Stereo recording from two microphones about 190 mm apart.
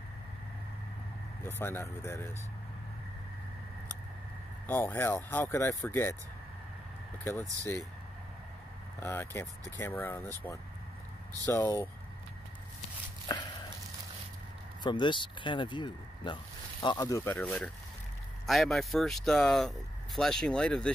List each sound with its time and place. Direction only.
1.6 s speech: 10° left (ahead or behind)
4.6 s speech: 10° left (ahead or behind)
7.2 s speech: 15° left (ahead or behind)
9.0 s speech: 10° left (ahead or behind)
14.8 s speech: 25° left (ahead or behind); by 20.9 s 5° left (ahead or behind)